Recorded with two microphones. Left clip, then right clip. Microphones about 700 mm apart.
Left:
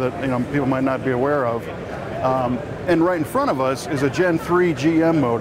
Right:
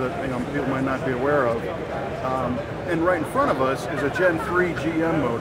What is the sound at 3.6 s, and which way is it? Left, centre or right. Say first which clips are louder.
Speech: left 2 dB; left.